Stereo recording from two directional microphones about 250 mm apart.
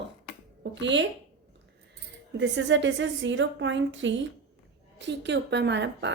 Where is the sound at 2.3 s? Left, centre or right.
Right.